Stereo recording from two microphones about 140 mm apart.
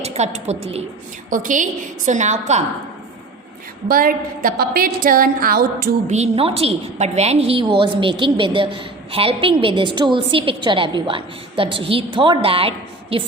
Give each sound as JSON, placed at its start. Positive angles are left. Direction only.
{"t": 0.0, "sound": "a woman's voice", "side_deg": -50}
{"t": 1.3, "sound": "a woman's voice", "side_deg": -65}
{"t": 3.8, "sound": "a woman's voice", "side_deg": -90}
{"t": 6.1, "sound": "a woman's voice", "side_deg": -50}